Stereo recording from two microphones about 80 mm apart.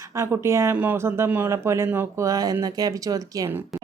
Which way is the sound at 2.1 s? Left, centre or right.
Right.